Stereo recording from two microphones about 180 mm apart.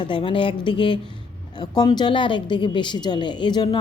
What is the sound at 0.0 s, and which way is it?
A woman's voice, 30° left (ahead or behind).